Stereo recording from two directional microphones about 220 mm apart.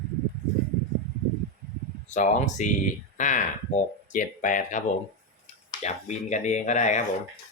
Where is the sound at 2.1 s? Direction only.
35° left (ahead or behind).